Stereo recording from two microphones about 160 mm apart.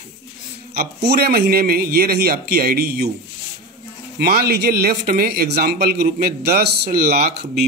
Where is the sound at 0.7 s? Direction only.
80° right.